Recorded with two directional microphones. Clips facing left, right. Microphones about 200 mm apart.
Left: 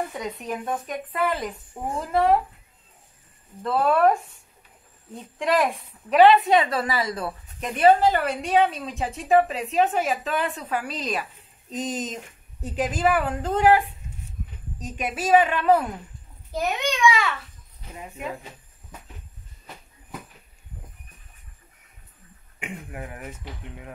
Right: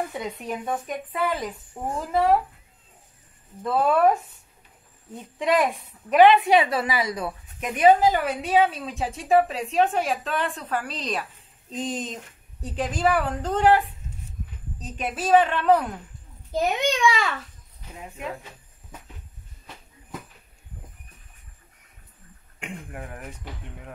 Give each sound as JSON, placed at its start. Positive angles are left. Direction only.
{"t": 0.1, "sound": "a woman's voice", "side_deg": -5}
{"t": 3.6, "sound": "a woman's voice", "side_deg": -5}
{"t": 5.4, "sound": "a woman's voice", "side_deg": -5}
{"t": 6.7, "sound": "a woman's voice", "side_deg": -5}
{"t": 17.1, "sound": "a child's voice", "side_deg": -35}
{"t": 17.9, "sound": "a woman's voice", "side_deg": 0}
{"t": 22.6, "sound": "a woman's voice", "side_deg": 5}